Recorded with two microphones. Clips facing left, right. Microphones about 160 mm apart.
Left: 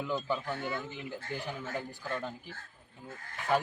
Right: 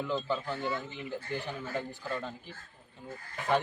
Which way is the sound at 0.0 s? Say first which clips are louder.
Right 1 dB; 10° left (ahead or behind).